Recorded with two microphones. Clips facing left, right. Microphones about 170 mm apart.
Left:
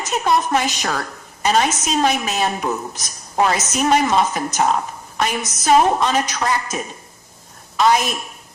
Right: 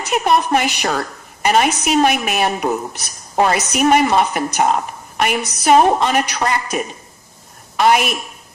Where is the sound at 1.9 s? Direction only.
65° right (ahead or behind).